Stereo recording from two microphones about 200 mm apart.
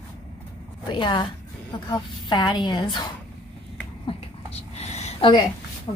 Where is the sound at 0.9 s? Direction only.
25° left (ahead or behind).